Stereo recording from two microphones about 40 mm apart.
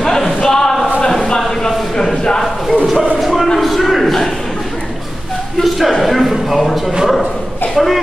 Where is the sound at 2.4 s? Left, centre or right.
Centre.